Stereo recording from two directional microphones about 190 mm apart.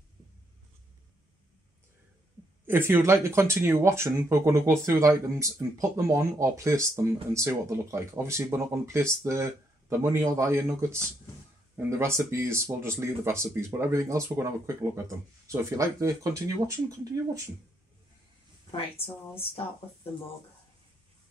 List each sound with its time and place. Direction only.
2.6 s speech: 10° right (ahead or behind)
18.7 s speech: 30° left (ahead or behind)